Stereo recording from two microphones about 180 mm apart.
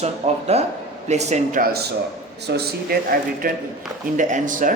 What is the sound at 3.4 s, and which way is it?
Speech, 50° right (ahead or behind).